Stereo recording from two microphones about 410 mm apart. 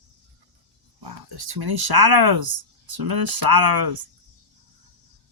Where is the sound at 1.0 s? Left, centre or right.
Right.